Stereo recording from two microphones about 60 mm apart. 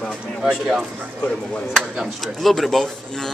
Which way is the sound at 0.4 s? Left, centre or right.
Centre.